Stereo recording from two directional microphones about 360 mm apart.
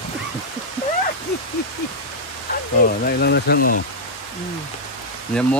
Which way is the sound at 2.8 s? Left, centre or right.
Left.